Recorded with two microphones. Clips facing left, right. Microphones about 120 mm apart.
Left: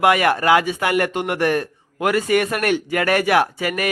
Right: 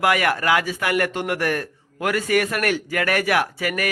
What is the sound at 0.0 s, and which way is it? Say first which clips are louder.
A man's voice: left 4 dB; 25° left (ahead or behind).